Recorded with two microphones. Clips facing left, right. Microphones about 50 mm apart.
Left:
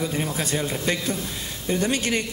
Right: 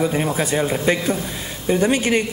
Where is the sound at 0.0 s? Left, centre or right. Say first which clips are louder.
Right 6 dB; right.